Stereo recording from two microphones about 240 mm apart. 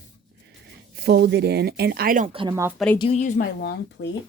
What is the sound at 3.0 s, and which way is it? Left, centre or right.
A woman's voice, left.